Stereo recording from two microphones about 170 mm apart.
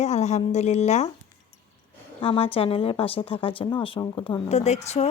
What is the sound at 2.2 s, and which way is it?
Speech, 35° left (ahead or behind).